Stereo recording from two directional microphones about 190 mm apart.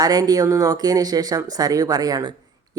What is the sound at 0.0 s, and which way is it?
A woman's voice, 20° right (ahead or behind).